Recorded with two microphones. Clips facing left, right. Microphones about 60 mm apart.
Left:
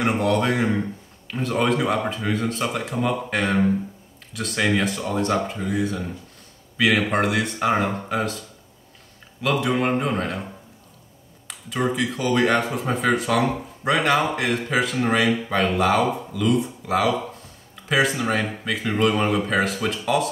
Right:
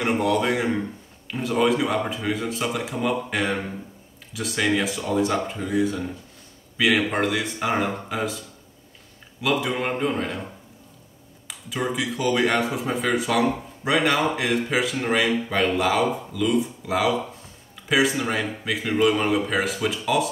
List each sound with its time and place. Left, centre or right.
0.0 s speech: centre
9.4 s speech: centre
11.4 s speech: centre